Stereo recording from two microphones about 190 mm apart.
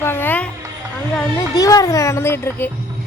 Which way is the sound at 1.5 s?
20° left (ahead or behind).